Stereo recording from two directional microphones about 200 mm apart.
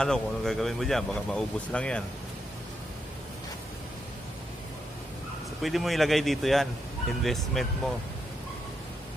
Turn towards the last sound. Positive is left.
turn(degrees=0)  # may be behind; listen again after turning